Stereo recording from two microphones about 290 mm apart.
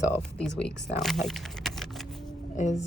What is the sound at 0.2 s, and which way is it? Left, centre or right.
Speech, centre.